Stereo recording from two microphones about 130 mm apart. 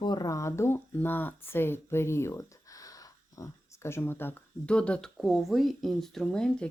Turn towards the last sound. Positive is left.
turn(degrees=5)  # may be behind; listen again after turning